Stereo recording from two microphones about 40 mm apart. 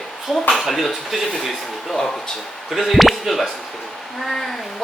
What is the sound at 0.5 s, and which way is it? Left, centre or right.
A woman's voice, centre.